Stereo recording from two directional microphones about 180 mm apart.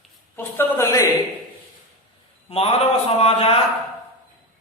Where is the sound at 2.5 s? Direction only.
35° left (ahead or behind).